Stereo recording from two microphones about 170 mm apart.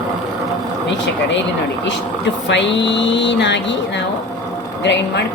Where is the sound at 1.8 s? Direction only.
90° left.